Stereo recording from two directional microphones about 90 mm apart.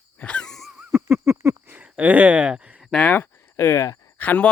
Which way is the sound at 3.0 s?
20° left (ahead or behind).